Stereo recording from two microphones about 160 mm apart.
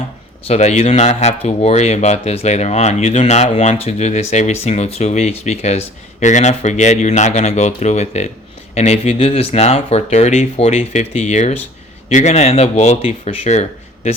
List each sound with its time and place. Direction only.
0.4 s speech: 45° left (ahead or behind)